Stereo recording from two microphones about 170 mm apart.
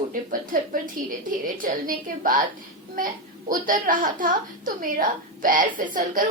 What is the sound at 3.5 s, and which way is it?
A woman's voice, 50° right (ahead or behind).